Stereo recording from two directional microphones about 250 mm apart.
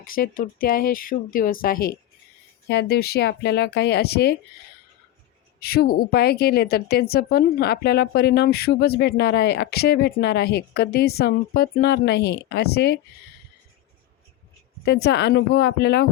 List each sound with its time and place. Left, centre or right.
0.0 s a woman's voice: left
5.5 s a woman's voice: left
14.8 s a woman's voice: left